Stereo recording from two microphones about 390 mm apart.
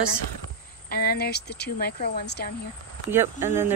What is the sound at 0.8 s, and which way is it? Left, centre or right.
Speech, left.